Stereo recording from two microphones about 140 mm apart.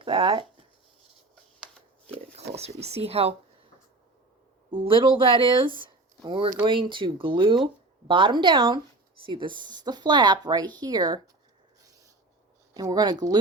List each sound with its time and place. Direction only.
0.0 s speech: 35° right (ahead or behind)
2.1 s speech: 50° right (ahead or behind)
4.7 s speech: 35° right (ahead or behind)
12.7 s speech: 25° right (ahead or behind)